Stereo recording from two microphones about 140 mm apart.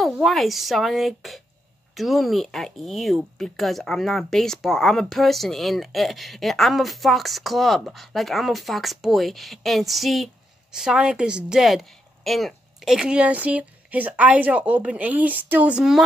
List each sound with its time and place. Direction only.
0.0 s speech: centre (ahead or behind)